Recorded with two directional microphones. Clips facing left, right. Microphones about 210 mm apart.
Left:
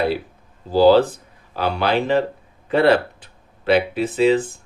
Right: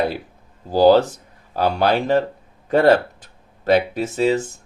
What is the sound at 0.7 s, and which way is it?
Speech, 45° right (ahead or behind).